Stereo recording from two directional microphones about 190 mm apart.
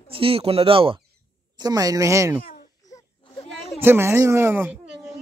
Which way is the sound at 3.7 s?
10° right (ahead or behind).